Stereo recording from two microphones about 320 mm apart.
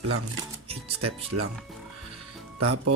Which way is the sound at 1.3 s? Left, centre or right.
Right.